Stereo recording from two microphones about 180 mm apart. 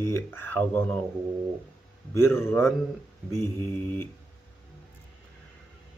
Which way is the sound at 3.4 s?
25° right (ahead or behind).